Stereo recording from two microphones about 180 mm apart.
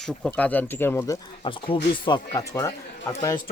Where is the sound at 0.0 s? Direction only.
5° left (ahead or behind).